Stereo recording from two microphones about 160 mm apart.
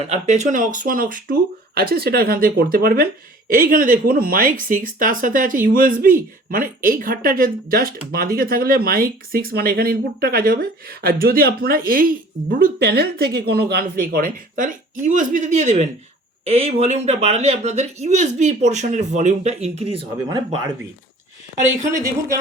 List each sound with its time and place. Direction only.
0.1 s speech: 45° right (ahead or behind)
21.8 s speech: 20° right (ahead or behind)